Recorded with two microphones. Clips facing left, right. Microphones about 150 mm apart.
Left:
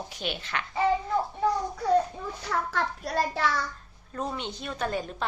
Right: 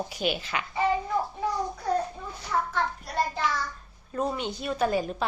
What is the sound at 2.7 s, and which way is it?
Child singing, 75° left (ahead or behind).